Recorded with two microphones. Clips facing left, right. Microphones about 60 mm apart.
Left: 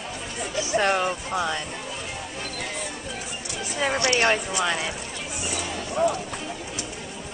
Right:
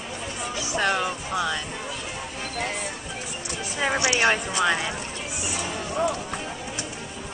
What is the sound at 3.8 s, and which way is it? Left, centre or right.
Speech, centre.